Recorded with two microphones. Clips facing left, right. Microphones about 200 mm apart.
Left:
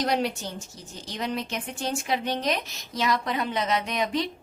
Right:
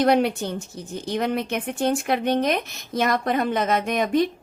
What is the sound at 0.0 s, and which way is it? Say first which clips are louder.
A woman's voice: right 7 dB; 55° right (ahead or behind).